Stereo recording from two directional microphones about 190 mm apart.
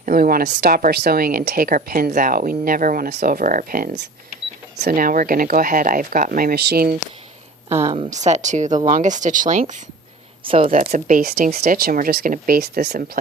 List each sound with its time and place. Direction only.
0.0 s a woman's voice: 50° right (ahead or behind)
7.7 s a woman's voice: 15° right (ahead or behind)
7.9 s speech: 35° right (ahead or behind)
10.4 s speech: 30° right (ahead or behind)
10.7 s a woman's voice: 45° right (ahead or behind)